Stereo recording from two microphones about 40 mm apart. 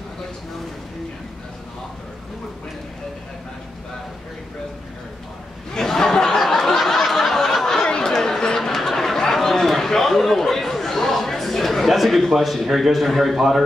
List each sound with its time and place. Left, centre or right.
5.8 s a sound: centre
7.0 s snicker: centre
7.8 s chatter: centre